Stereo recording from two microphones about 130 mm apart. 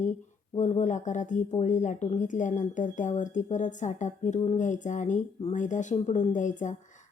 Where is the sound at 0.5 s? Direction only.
65° left (ahead or behind).